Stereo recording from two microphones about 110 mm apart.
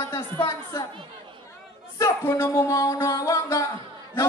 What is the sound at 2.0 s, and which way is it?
A man's voice, 25° left (ahead or behind).